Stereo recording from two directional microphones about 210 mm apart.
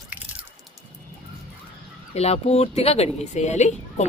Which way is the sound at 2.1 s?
30° left (ahead or behind).